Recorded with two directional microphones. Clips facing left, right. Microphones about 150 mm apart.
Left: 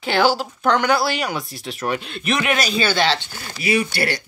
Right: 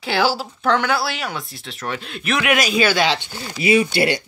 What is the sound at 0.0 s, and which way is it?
Speech, 5° right (ahead or behind).